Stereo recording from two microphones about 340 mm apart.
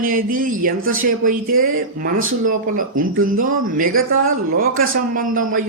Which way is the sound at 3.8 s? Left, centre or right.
Right.